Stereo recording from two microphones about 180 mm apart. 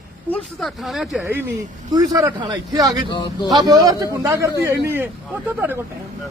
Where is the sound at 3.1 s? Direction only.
25° left (ahead or behind).